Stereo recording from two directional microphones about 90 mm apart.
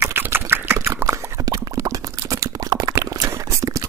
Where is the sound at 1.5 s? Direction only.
40° right (ahead or behind).